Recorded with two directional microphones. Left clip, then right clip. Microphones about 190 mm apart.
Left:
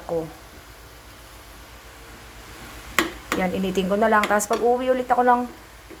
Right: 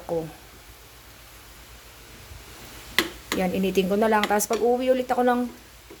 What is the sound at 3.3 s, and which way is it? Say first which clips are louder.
Speech: right 1 dB; 35° right (ahead or behind).